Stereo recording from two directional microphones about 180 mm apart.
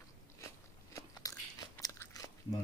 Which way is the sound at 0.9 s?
20° left (ahead or behind).